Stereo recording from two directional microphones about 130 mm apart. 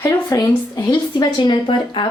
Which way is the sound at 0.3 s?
25° left (ahead or behind).